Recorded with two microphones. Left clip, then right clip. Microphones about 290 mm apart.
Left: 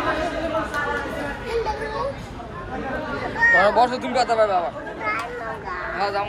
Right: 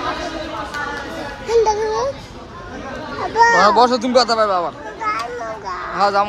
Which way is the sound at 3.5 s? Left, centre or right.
Right.